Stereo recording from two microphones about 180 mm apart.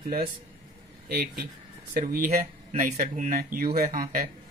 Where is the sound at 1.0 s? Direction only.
60° right (ahead or behind).